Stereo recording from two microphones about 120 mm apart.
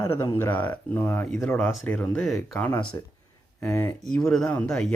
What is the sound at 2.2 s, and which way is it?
Speech, centre (ahead or behind).